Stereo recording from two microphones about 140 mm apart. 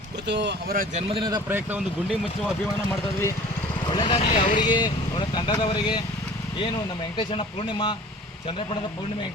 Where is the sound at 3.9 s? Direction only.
35° left (ahead or behind).